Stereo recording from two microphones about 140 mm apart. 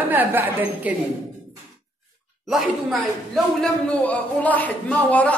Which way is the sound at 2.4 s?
Centre (ahead or behind).